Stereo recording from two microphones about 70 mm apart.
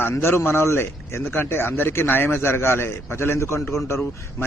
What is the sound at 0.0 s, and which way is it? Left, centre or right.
Speech, left.